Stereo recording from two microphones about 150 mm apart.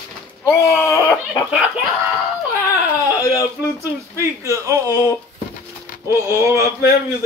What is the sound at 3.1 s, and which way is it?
Speech, 20° left (ahead or behind).